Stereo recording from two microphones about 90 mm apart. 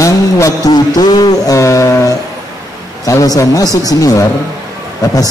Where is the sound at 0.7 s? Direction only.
50° left (ahead or behind).